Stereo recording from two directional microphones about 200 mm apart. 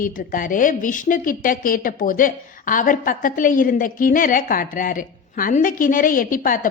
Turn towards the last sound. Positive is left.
turn(degrees=40)  # may be behind; listen again after turning